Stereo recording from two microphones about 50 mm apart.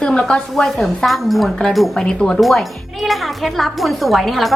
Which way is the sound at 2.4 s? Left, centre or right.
Centre.